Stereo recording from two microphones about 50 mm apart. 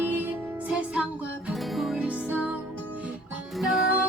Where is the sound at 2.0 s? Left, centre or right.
Right.